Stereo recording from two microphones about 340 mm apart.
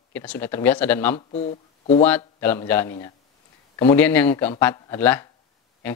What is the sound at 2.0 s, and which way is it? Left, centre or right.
Speech, centre.